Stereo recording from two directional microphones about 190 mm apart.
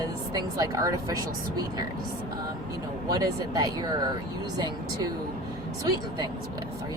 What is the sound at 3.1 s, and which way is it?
Speech, 20° right (ahead or behind).